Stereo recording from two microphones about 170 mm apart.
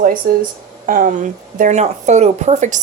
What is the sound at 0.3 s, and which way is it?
Speech, 60° right (ahead or behind).